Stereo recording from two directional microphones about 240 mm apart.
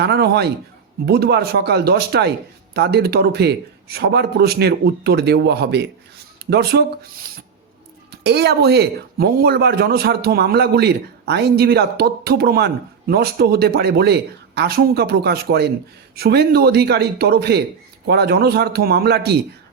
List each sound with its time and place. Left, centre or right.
0.0 s a man's voice: right
8.1 s speech: right